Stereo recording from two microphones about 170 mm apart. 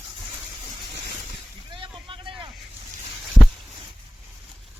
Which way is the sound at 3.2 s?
Centre (ahead or behind).